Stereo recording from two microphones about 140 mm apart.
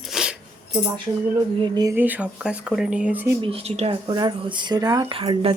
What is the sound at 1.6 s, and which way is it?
Speech, 30° right (ahead or behind).